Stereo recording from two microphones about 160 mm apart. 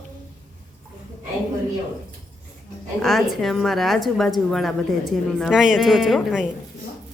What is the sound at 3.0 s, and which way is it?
A woman's voice, centre (ahead or behind).